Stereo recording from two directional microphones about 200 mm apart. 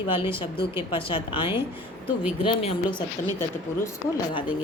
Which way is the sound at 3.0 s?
15° left (ahead or behind).